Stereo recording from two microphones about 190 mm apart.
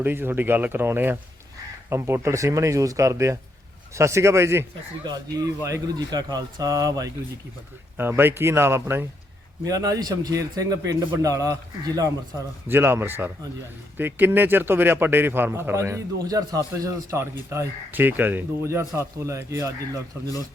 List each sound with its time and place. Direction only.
0.0 s a man's voice: 10° right (ahead or behind)
5.6 s a man's voice: 20° right (ahead or behind)